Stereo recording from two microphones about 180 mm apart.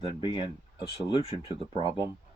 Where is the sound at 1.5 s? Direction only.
30° right (ahead or behind).